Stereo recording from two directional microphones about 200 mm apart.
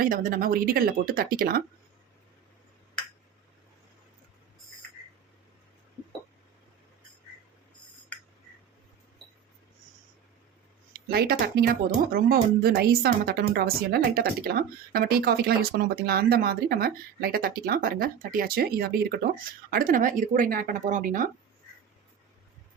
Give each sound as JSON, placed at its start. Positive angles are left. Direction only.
{"t": 0.0, "sound": "speech", "side_deg": -45}
{"t": 11.1, "sound": "speech", "side_deg": -50}